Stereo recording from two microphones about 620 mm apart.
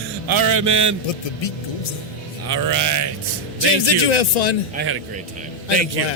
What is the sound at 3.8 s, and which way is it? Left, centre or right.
Speech, left.